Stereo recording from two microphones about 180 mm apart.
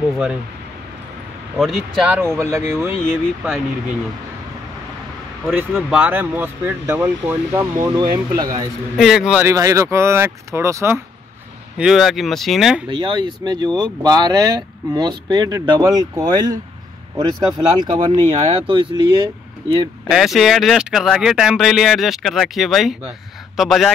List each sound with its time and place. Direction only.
1.6 s speech: centre (ahead or behind)
2.3 s speech: 15° right (ahead or behind)
3.1 s speech: centre (ahead or behind)
5.5 s speech: 10° right (ahead or behind)
8.9 s speech: centre (ahead or behind)
9.4 s speech: 15° right (ahead or behind)
11.8 s speech: centre (ahead or behind)
12.9 s speech: 25° right (ahead or behind)
17.7 s speech: 25° right (ahead or behind)
20.1 s a man's voice: centre (ahead or behind)